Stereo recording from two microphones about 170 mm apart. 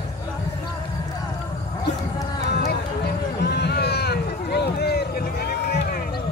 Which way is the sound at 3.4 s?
75° left (ahead or behind).